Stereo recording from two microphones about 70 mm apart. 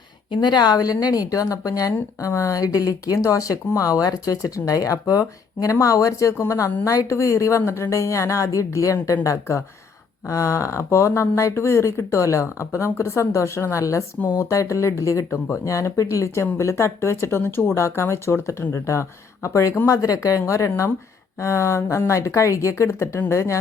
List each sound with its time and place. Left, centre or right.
0.3 s a woman's voice: left